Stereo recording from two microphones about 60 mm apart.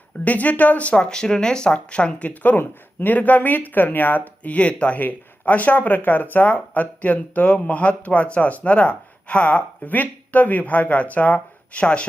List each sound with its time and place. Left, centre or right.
0.3 s speech: left
4.4 s speech: left